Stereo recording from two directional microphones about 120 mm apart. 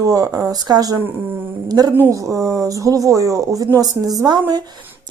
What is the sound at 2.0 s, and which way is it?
Speech, 20° right (ahead or behind).